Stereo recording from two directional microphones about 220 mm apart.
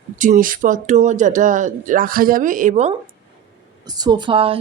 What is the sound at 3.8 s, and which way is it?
Speech, 20° right (ahead or behind).